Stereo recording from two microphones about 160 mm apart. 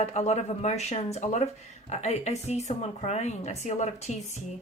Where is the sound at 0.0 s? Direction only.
40° left (ahead or behind).